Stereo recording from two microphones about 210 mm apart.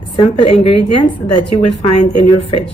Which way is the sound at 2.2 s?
25° left (ahead or behind).